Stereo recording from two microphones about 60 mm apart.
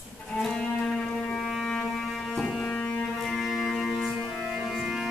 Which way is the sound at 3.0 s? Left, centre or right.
Centre.